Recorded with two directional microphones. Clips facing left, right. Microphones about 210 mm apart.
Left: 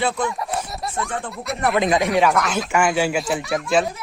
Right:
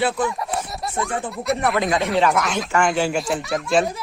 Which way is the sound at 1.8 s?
15° left (ahead or behind).